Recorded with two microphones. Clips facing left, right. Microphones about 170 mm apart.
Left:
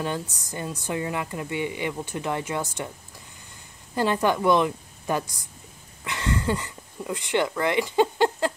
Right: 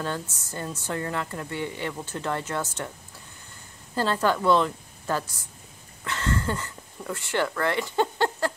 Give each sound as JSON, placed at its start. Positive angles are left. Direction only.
{"t": 0.0, "sound": "a woman's voice", "side_deg": 15}
{"t": 3.9, "sound": "a woman's voice", "side_deg": 15}